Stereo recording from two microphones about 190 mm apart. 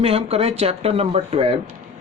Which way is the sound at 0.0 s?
30° right (ahead or behind).